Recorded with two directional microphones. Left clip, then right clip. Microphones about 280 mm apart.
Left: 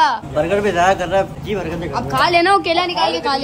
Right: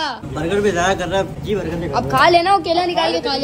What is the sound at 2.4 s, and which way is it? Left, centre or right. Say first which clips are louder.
Speech: left 1 dB; left.